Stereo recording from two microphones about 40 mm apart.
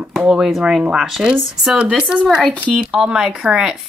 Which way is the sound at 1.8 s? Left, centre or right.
Right.